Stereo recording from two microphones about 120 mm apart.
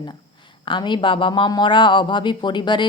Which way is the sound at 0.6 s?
40° left (ahead or behind).